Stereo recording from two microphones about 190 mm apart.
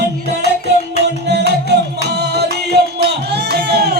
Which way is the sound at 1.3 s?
60° right (ahead or behind).